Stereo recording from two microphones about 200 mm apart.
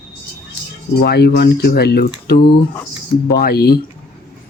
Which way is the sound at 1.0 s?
55° left (ahead or behind).